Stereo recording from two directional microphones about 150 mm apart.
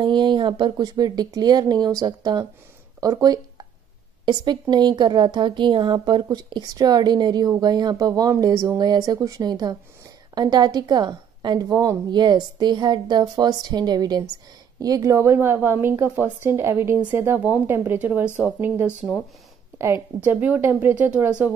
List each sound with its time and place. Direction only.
0.0 s a woman's voice: 30° right (ahead or behind); by 18.9 s 10° right (ahead or behind)
20.2 s a woman's voice: 10° right (ahead or behind)